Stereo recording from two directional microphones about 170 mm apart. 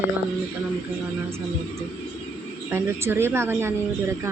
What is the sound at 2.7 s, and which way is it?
Speech, 15° right (ahead or behind).